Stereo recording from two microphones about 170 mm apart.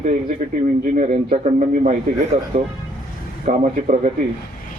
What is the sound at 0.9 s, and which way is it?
A man's voice, 45° right (ahead or behind).